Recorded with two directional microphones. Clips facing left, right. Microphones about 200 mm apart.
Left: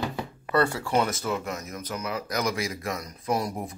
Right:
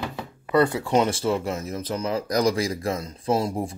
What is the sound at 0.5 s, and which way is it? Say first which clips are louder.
Speech: right 4 dB; 20° right (ahead or behind).